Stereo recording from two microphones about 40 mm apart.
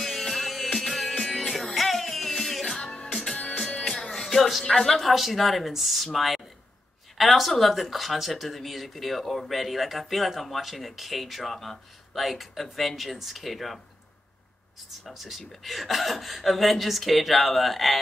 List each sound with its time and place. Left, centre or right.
0.0 s music: centre
3.7 s music: left
4.4 s speech: centre
15.0 s speech: centre